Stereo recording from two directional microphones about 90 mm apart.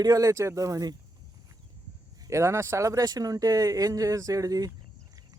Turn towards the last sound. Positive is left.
turn(degrees=-40)  # may be behind; listen again after turning